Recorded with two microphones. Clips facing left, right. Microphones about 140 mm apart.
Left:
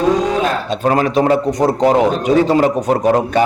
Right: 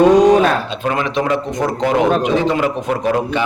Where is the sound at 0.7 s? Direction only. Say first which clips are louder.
Left 5 dB; 40° left (ahead or behind).